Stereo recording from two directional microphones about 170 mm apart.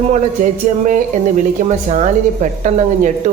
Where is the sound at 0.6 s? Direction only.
50° right (ahead or behind).